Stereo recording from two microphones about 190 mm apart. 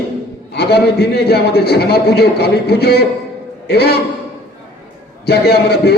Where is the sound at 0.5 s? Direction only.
60° left (ahead or behind).